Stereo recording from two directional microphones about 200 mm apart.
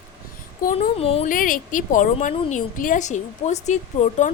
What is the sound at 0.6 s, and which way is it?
Speech, 40° left (ahead or behind).